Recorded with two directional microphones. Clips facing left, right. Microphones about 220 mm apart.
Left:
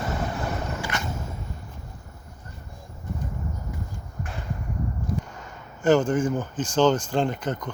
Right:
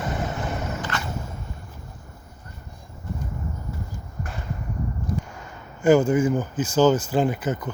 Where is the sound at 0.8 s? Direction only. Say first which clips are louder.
Right 1 dB; 15° left (ahead or behind).